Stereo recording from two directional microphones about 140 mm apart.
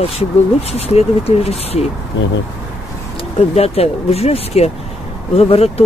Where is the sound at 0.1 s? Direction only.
45° left (ahead or behind).